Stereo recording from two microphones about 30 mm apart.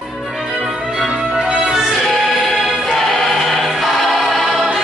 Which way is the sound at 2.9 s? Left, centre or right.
Centre.